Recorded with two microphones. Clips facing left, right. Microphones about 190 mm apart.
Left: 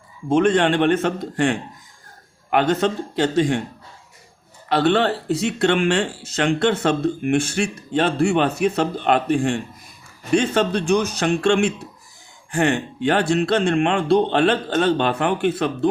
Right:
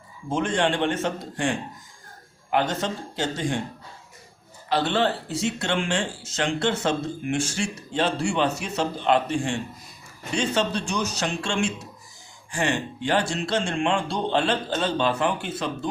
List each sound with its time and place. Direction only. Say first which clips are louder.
0.3 s speech: left 7 dB; 65° left (ahead or behind)
4.7 s speech: left 5 dB; 60° left (ahead or behind)